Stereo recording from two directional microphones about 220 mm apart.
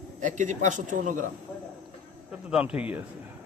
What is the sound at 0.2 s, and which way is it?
A man's voice, 35° right (ahead or behind).